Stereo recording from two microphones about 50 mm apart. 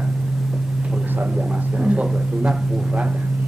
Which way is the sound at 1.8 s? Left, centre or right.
Right.